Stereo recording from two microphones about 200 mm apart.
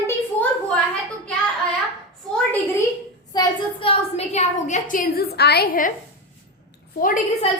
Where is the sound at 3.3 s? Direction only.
25° left (ahead or behind); by 5.9 s 45° left (ahead or behind).